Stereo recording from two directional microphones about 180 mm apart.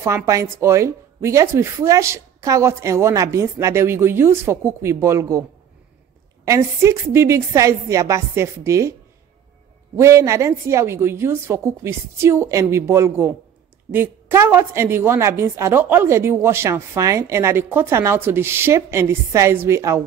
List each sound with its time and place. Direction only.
0.0 s a woman's voice: 15° right (ahead or behind)
6.4 s a woman's voice: 15° right (ahead or behind)
9.9 s a woman's voice: 15° right (ahead or behind)